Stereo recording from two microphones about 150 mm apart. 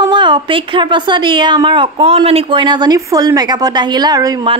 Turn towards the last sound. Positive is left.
turn(degrees=-30)  # may be behind; listen again after turning